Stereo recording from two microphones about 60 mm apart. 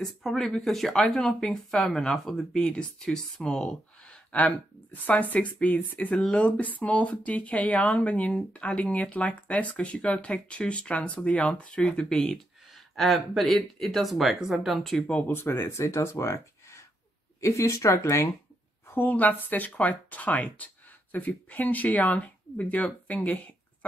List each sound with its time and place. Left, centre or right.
0.0 s speech: centre
12.7 s speech: centre
15.0 s speech: left
15.2 s speech: left
18.9 s speech: left
23.0 s a sound: left